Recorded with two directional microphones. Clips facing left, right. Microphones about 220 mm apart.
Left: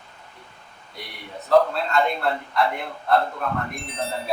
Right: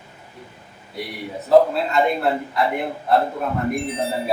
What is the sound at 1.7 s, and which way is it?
A man's voice, 5° right (ahead or behind).